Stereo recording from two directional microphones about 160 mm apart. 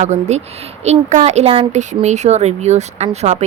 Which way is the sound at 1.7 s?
45° right (ahead or behind).